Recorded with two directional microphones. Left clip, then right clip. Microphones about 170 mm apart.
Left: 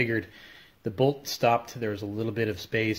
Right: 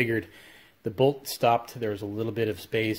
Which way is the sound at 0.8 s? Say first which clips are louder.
Right 2 dB; 15° right (ahead or behind).